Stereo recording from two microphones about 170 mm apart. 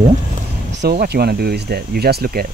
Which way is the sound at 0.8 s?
70° right (ahead or behind).